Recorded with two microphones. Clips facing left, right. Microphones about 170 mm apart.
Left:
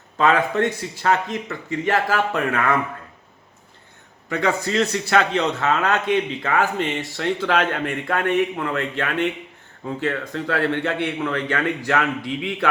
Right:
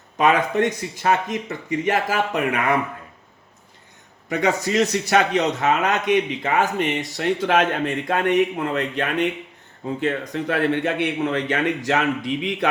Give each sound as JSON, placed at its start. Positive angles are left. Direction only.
{"t": 0.2, "sound": "a man's voice", "side_deg": -20}
{"t": 4.3, "sound": "a man's voice", "side_deg": -20}